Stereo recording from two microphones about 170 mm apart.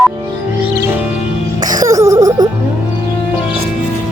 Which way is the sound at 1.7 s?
20° right (ahead or behind).